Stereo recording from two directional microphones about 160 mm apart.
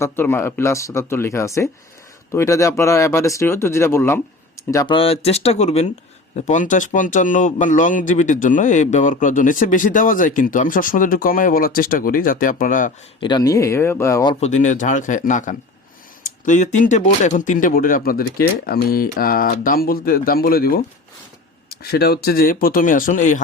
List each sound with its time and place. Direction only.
0.0 s speech: 15° left (ahead or behind)
4.9 s speech: 35° left (ahead or behind); by 12.9 s 55° left (ahead or behind)
13.1 s speech: 30° left (ahead or behind)
14.4 s a man's voice: 50° left (ahead or behind)